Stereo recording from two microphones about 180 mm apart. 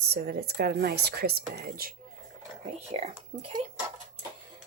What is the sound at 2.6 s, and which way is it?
Speech, 35° right (ahead or behind).